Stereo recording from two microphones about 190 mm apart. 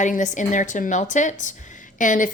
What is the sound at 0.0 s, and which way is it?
Speech, 40° left (ahead or behind).